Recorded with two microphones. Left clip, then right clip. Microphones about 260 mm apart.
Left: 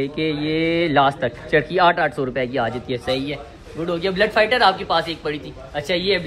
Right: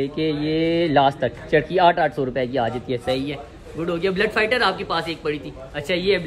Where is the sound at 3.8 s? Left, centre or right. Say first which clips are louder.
Left 2 dB; centre.